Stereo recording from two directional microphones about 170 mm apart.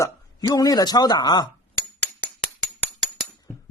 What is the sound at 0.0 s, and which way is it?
Speech, 20° left (ahead or behind).